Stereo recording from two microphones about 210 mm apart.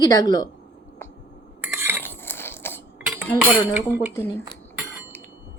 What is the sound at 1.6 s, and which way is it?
Stir, 10° right (ahead or behind).